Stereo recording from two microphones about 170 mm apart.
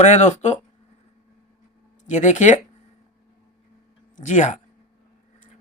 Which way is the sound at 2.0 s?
45° left (ahead or behind).